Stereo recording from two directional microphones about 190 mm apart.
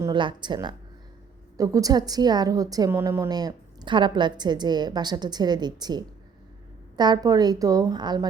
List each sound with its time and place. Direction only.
0.0 s a woman's voice: 25° right (ahead or behind)